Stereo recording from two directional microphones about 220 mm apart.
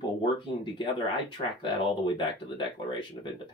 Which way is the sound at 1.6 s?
20° left (ahead or behind).